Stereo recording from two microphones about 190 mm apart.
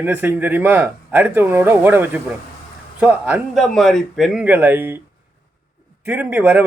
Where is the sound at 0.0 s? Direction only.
10° right (ahead or behind).